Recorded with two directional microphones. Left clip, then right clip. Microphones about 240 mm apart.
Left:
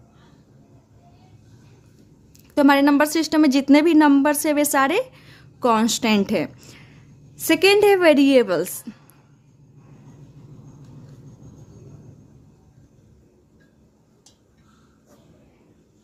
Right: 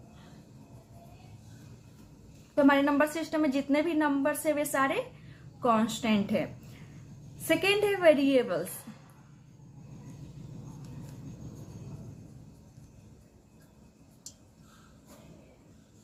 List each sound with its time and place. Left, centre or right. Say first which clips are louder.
2.6 s a woman's voice: left 8 dB; left